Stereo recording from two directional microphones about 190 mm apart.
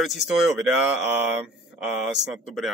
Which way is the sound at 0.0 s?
Centre (ahead or behind).